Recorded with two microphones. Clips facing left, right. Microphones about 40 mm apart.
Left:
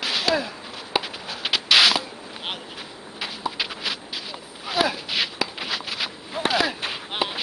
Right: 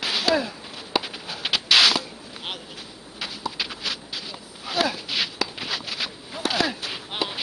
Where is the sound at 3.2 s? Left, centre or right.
Centre.